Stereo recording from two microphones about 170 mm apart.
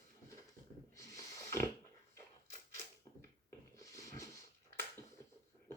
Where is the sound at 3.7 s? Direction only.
20° left (ahead or behind).